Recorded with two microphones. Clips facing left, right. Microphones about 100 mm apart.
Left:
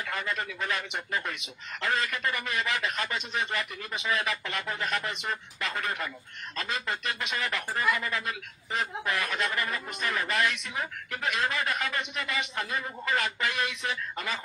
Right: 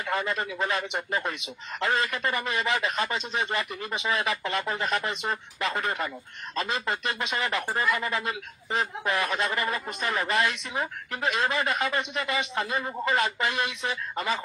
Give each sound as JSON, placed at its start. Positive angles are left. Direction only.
{"t": 0.0, "sound": "a man's voice", "side_deg": -25}